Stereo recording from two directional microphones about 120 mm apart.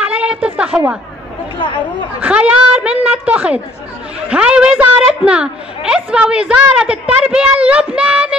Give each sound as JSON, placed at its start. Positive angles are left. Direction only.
{"t": 0.0, "sound": "a sound", "side_deg": -10}
{"t": 1.6, "sound": "speech", "side_deg": 45}
{"t": 2.2, "sound": "a woman's voice", "side_deg": -10}